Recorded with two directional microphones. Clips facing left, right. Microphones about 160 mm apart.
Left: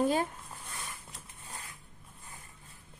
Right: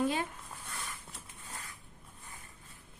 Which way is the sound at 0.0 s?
40° left (ahead or behind).